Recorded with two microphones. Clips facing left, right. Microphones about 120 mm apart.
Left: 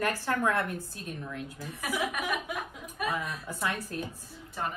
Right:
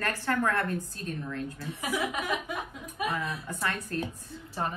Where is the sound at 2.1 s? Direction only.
25° right (ahead or behind).